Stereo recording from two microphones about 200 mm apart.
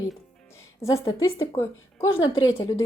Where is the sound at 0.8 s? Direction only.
15° left (ahead or behind).